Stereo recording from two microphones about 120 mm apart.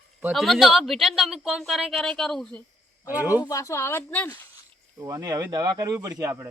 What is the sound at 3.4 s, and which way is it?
Speech, 25° left (ahead or behind).